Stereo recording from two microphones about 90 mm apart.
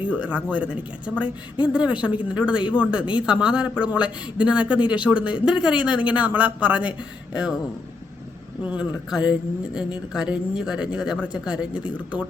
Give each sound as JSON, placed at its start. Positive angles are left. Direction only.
{"t": 0.1, "sound": "a woman's voice", "side_deg": -15}
{"t": 8.6, "sound": "a woman's voice", "side_deg": -15}